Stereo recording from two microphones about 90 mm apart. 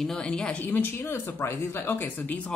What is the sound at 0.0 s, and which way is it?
Speech, 5° left (ahead or behind).